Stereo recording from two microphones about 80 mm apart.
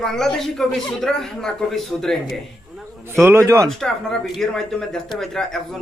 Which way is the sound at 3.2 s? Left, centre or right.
Right.